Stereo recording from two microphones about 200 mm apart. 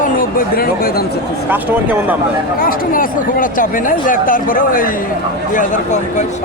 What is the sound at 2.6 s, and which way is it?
Speech, 45° left (ahead or behind).